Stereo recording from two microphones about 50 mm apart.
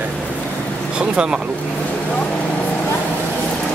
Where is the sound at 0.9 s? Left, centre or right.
Centre.